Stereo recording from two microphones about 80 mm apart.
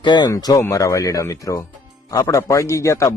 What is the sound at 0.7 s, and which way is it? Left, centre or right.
Speech, left.